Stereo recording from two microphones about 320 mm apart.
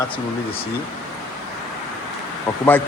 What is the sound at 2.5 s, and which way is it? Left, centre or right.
Speech, centre.